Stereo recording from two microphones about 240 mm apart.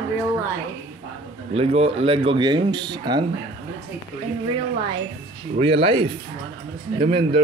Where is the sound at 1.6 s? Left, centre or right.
Right.